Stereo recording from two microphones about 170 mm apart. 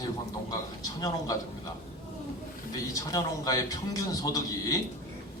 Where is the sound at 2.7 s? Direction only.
20° left (ahead or behind).